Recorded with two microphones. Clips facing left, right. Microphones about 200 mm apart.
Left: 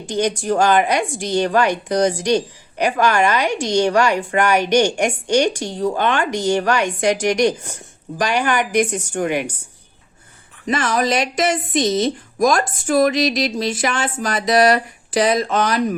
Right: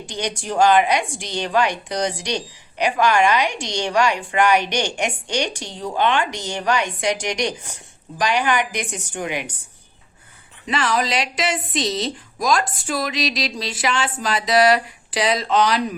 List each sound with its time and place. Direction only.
0.1 s a woman's voice: 45° left (ahead or behind)
10.7 s a woman's voice: 45° left (ahead or behind)